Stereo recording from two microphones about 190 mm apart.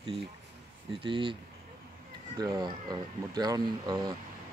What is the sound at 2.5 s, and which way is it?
Speech, 20° right (ahead or behind).